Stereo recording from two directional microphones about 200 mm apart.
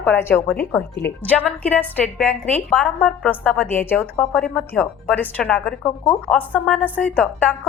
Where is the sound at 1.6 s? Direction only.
5° left (ahead or behind).